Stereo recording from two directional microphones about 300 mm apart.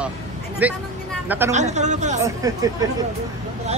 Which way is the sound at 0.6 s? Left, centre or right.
Centre.